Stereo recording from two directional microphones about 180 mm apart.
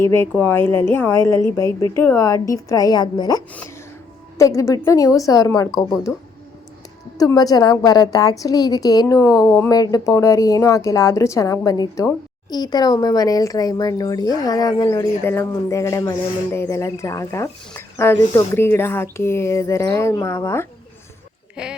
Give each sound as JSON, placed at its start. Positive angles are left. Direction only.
{"t": 0.0, "sound": "a woman's voice", "side_deg": 15}
{"t": 7.2, "sound": "a woman's voice", "side_deg": 20}
{"t": 21.5, "sound": "speech", "side_deg": -5}